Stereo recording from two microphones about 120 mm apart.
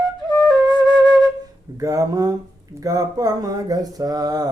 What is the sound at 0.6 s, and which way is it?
Flute, 35° right (ahead or behind).